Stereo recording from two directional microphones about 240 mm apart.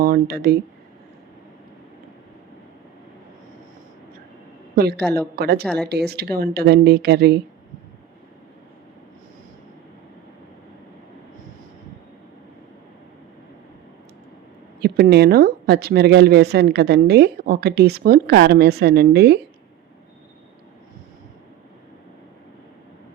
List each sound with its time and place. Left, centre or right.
0.0 s speech: right
4.7 s a woman's voice: right
5.6 s speech: centre
5.9 s speech: right
14.8 s speech: right